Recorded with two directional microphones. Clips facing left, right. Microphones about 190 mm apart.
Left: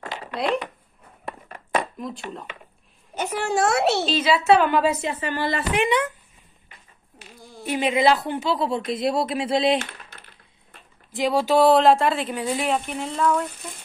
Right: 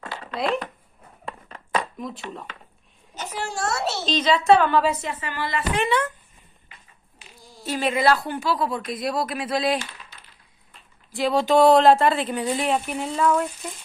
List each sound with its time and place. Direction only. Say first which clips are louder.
0.3 s speech: left 1 dB; centre (ahead or behind)
2.0 s speech: left 1 dB; centre (ahead or behind)
3.2 s a child's voice: left 7 dB; 55° left (ahead or behind)
4.1 s a woman's voice: right 3 dB; 10° left (ahead or behind)
5.0 s a woman's voice: left 4 dB; 30° left (ahead or behind)
5.8 s a woman's voice: left 1 dB; 15° left (ahead or behind)
7.6 s a woman's voice: left 1 dB; 20° left (ahead or behind)
9.8 s typing: left 3 dB; 55° left (ahead or behind)
11.1 s speech: even; 15° left (ahead or behind); by 13.5 s 5° right (ahead or behind)